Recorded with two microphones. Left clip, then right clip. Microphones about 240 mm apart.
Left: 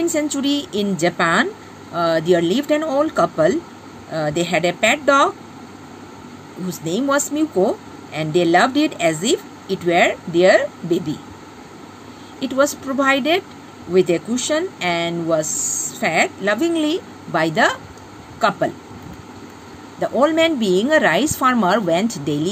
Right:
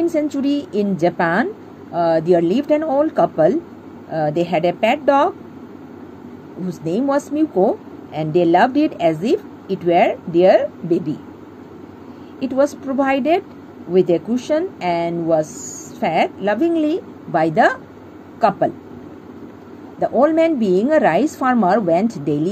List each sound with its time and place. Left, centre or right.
0.0 s a woman's voice: centre
6.7 s a woman's voice: centre
12.4 s a woman's voice: centre
20.0 s speech: centre